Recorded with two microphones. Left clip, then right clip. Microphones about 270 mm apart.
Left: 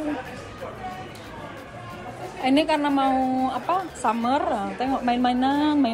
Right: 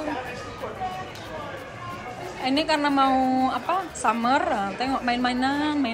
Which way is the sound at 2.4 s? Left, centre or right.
Centre.